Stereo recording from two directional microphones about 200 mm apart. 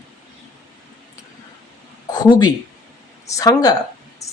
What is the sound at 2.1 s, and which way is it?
Speech, 20° left (ahead or behind).